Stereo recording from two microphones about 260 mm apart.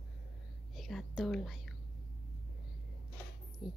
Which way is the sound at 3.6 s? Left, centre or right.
Centre.